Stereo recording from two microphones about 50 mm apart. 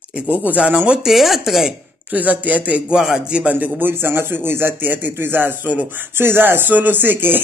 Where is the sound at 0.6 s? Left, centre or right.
Right.